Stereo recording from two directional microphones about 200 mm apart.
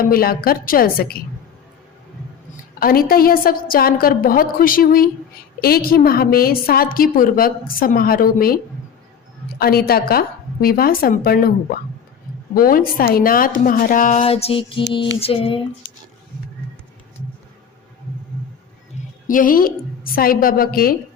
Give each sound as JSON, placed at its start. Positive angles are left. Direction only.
{"t": 0.1, "sound": "a woman's voice", "side_deg": 50}
{"t": 2.8, "sound": "a woman's voice", "side_deg": 45}
{"t": 9.6, "sound": "a woman's voice", "side_deg": 50}
{"t": 12.5, "sound": "a woman's voice", "side_deg": 45}
{"t": 15.2, "sound": "female singing", "side_deg": 25}
{"t": 18.9, "sound": "music", "side_deg": 35}
{"t": 19.3, "sound": "a woman's voice", "side_deg": 45}